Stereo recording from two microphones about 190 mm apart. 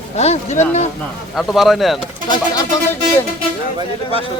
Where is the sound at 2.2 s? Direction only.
20° left (ahead or behind).